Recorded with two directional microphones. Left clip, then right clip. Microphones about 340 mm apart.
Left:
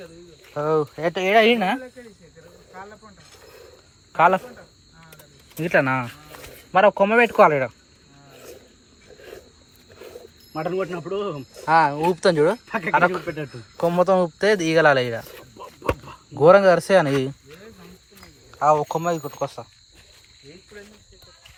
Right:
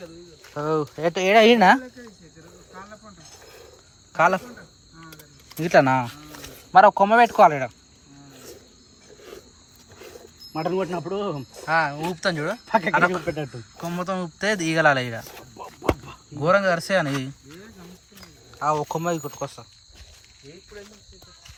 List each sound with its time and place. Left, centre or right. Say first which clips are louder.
0.5 s speech: left 3 dB; centre
4.2 s speech: left 2 dB; centre
5.5 s speech: right 2 dB; centre
7.3 s speech: left 1 dB; centre
10.7 s a man's voice: right 1 dB; right
11.6 s speech: left 5 dB; centre
12.6 s a man's voice: right 5 dB; right
12.9 s speech: left 6 dB; centre
18.5 s speech: left 5 dB; centre